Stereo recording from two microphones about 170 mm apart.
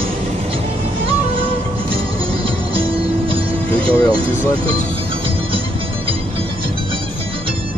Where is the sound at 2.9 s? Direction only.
30° right (ahead or behind).